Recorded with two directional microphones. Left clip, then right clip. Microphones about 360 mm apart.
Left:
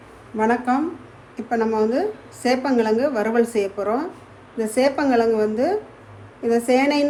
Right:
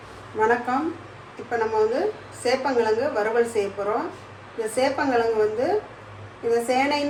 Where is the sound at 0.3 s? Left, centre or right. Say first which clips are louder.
Left 1 dB; left.